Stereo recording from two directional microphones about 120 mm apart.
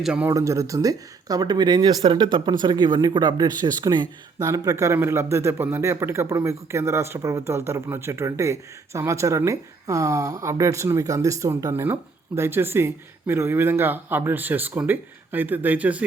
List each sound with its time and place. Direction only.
0.0 s speech: 10° right (ahead or behind)
0.3 s speech: 25° right (ahead or behind)